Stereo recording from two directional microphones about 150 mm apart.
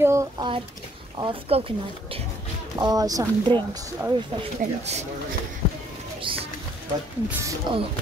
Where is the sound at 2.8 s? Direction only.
25° right (ahead or behind).